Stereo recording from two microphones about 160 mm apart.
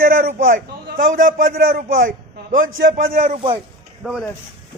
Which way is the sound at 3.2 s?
40° right (ahead or behind).